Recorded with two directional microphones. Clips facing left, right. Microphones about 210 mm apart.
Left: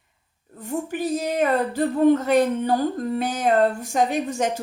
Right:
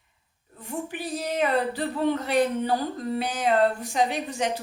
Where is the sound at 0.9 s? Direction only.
45° left (ahead or behind).